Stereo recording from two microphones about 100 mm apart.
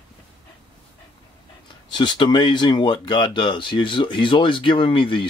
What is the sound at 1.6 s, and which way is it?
Speech, 50° left (ahead or behind).